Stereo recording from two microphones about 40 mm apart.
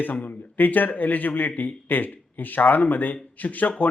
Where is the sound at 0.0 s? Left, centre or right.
Left.